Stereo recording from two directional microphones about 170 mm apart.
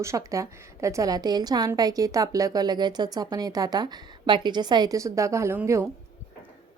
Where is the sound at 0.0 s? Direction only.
20° right (ahead or behind).